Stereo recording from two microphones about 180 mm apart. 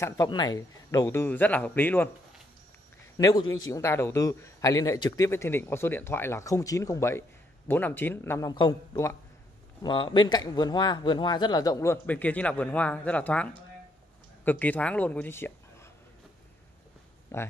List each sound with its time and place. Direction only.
0.0 s a man's voice: 20° left (ahead or behind)
3.2 s a man's voice: 20° left (ahead or behind)
17.3 s speech: 15° left (ahead or behind)